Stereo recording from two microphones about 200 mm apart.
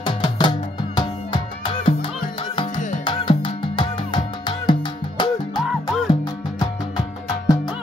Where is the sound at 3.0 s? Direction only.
25° left (ahead or behind).